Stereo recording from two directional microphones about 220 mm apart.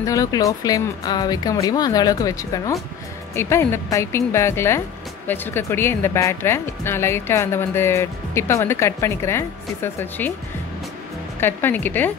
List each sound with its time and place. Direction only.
0.0 s speech: 15° left (ahead or behind)
11.3 s speech: 10° left (ahead or behind)